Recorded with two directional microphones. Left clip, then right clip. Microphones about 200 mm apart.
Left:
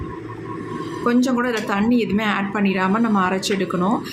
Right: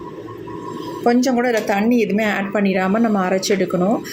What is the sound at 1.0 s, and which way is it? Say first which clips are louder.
A woman's voice: right 3 dB; 10° right (ahead or behind).